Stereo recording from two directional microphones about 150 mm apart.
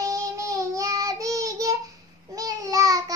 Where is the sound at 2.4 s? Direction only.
25° right (ahead or behind).